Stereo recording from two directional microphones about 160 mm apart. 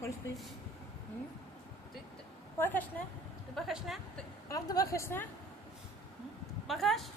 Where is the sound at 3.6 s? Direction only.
Centre (ahead or behind).